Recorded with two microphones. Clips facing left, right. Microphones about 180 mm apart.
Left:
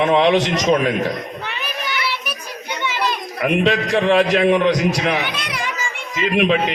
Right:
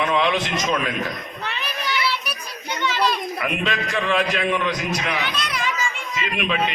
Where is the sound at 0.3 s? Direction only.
85° left.